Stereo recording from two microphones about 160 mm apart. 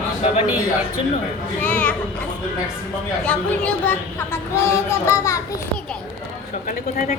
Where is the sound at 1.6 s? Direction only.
10° left (ahead or behind).